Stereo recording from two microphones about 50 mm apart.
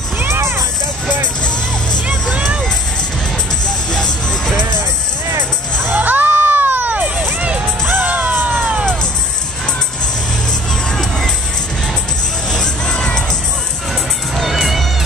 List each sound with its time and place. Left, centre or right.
0.3 s music: right
3.9 s music: centre
5.9 s crowd: right
7.3 s music: right
7.8 s music: right
10.9 s music: centre
12.4 s music: centre
14.3 s music: centre